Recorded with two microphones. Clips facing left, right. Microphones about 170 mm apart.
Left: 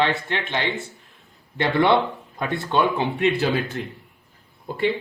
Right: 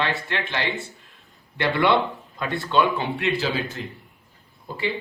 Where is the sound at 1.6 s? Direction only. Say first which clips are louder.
Left 2 dB; 25° left (ahead or behind).